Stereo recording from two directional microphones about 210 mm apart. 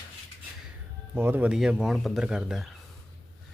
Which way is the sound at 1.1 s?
10° right (ahead or behind).